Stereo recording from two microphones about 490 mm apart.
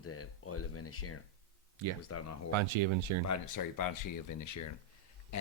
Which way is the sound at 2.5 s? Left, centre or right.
Right.